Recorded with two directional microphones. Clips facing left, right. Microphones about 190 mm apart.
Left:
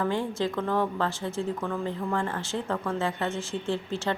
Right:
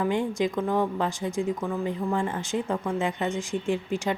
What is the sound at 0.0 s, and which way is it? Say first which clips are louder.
Speech: right 2 dB; 15° right (ahead or behind).